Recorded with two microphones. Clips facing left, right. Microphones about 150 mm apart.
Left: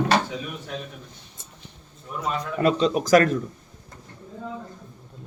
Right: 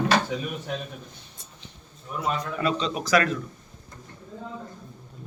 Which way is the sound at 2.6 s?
45° left (ahead or behind).